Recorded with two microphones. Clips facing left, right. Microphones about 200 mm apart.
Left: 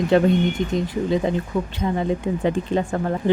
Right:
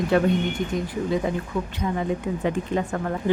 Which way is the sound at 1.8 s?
30° left (ahead or behind).